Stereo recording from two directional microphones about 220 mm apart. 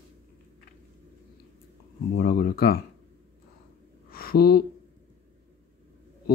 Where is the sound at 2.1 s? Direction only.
45° left (ahead or behind).